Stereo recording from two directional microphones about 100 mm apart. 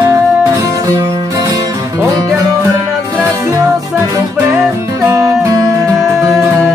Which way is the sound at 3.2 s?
30° right (ahead or behind).